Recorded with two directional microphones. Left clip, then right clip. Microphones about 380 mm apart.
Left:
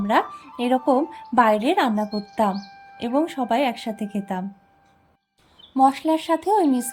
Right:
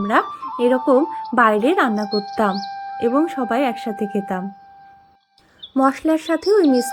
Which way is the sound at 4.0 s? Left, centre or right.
Left.